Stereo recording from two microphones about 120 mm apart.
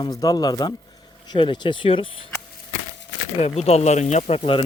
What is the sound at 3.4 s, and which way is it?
Speech, 60° left (ahead or behind).